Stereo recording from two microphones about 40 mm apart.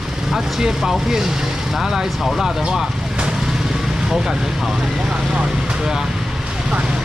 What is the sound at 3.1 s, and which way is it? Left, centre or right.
Vehicle, centre.